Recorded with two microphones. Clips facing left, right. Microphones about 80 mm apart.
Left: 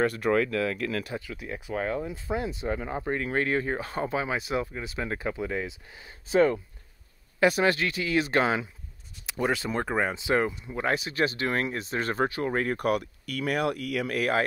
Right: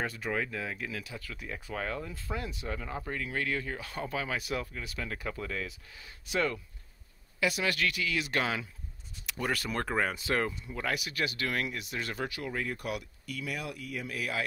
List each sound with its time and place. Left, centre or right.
0.0 s speech: left
1.2 s speech: centre; by 6.6 s left
7.3 s speech: left
7.7 s speech: left